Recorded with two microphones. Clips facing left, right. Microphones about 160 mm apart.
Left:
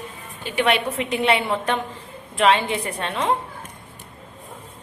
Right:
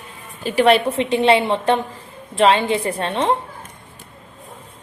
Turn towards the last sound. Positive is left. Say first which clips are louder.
# right 4 dB
turn(degrees=-30)  # may be behind; listen again after turning